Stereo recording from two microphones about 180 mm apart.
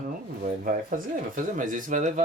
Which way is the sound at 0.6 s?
50° right (ahead or behind).